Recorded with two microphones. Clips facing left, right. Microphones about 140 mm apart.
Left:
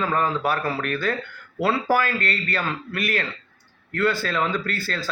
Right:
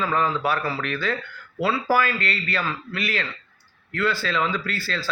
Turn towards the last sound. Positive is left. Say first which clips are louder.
# left 1 dB
turn(degrees=50)  # may be behind; listen again after turning